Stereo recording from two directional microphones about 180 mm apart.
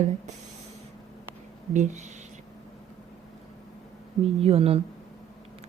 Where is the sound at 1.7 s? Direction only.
40° right (ahead or behind).